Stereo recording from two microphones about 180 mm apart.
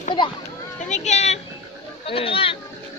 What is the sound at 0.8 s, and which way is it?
Speech, 40° left (ahead or behind).